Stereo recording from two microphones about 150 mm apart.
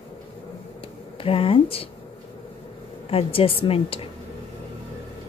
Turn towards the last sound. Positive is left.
turn(degrees=40)  # may be behind; listen again after turning